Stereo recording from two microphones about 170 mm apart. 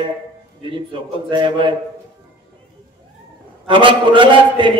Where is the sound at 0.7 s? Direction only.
30° right (ahead or behind).